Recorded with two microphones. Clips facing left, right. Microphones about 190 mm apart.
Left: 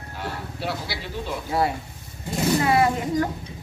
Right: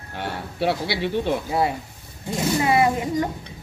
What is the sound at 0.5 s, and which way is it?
Speech, 70° right (ahead or behind).